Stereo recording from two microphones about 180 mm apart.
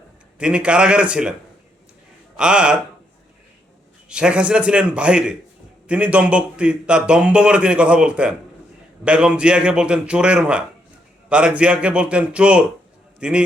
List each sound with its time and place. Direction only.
0.3 s a man's voice: 5° right (ahead or behind)
2.3 s speech: 5° right (ahead or behind)
4.1 s a man's voice: 5° right (ahead or behind)